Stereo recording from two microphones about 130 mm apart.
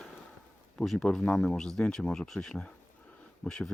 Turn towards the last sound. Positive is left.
turn(degrees=5)  # may be behind; listen again after turning